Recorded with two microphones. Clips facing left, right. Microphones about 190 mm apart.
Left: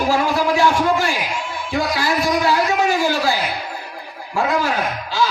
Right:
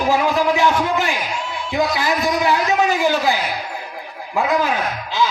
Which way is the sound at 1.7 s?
20° right (ahead or behind).